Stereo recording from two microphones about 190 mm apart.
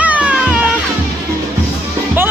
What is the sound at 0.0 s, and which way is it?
Music, 5° right (ahead or behind).